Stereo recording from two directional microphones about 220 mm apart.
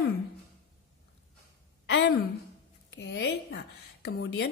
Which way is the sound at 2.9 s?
50° left (ahead or behind).